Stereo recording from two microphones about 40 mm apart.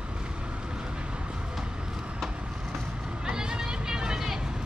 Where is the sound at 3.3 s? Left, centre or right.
Centre.